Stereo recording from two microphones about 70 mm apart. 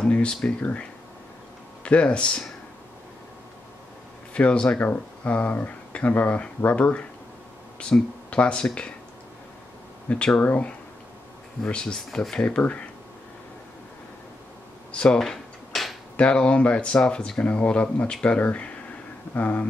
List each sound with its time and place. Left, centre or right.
0.0 s speech: centre
1.9 s speech: centre
4.3 s speech: centre
10.0 s speech: centre
14.9 s speech: centre
15.1 s a sound: centre
16.2 s speech: centre